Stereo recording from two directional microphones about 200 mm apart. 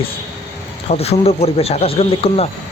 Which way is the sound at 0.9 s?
30° left (ahead or behind).